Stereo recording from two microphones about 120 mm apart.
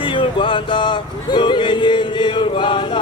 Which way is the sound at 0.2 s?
45° left (ahead or behind).